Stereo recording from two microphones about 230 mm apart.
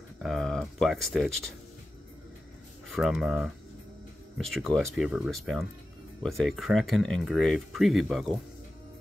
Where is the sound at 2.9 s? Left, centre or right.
Centre.